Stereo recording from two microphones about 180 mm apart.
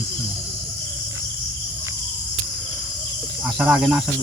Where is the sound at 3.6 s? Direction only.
5° right (ahead or behind).